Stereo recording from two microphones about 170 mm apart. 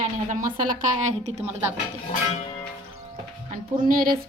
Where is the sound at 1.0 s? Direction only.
40° right (ahead or behind).